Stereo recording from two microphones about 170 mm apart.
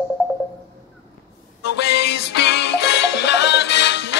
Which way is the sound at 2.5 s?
85° left.